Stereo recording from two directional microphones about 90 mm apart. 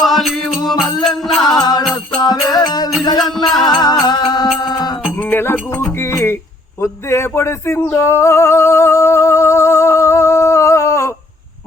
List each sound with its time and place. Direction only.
0.0 s music: centre (ahead or behind)
1.5 s music: 50° left (ahead or behind)
3.2 s music: centre (ahead or behind)
3.6 s music: 50° left (ahead or behind)
5.3 s music: 25° left (ahead or behind)
6.8 s a sound: 30° left (ahead or behind)
8.0 s music: 30° left (ahead or behind)